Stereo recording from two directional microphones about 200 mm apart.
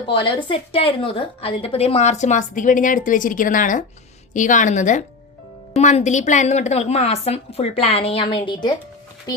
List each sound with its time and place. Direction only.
0.1 s a woman's voice: 25° left (ahead or behind)